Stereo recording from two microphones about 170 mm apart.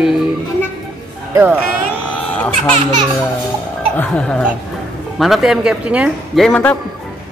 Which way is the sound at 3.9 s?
5° left (ahead or behind).